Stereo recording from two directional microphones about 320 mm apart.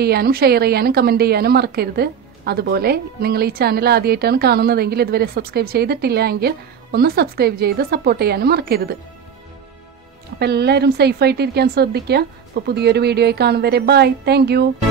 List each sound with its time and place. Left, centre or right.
0.0 s a woman's voice: right
10.4 s a woman's voice: right